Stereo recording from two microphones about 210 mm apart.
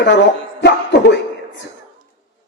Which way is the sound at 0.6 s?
55° left (ahead or behind).